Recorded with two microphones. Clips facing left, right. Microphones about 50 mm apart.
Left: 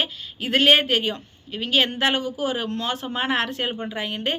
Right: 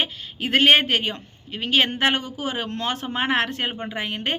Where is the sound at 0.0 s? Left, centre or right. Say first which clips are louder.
Right 1 dB; right.